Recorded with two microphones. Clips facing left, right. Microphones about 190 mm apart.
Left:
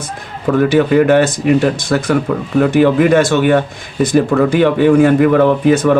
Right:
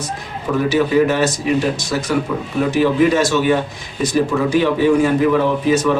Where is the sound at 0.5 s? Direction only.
55° left (ahead or behind).